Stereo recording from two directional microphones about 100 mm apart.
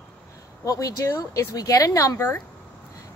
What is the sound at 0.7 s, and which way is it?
Speech, 35° left (ahead or behind).